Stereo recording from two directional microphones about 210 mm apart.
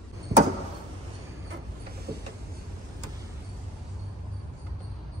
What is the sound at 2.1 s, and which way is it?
Vehicle, 45° right (ahead or behind).